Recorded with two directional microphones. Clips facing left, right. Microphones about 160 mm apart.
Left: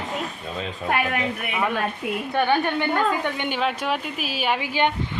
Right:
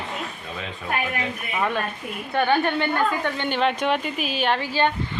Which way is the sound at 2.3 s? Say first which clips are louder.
Right 1 dB; 15° left (ahead or behind).